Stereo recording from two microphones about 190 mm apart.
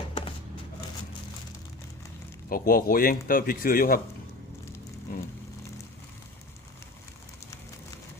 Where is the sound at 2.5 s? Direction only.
50° left (ahead or behind).